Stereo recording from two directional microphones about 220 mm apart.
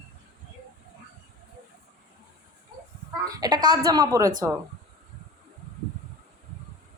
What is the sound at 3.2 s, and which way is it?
A woman's voice, 15° right (ahead or behind).